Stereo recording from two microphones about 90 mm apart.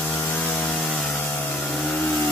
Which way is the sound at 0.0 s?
20° left (ahead or behind).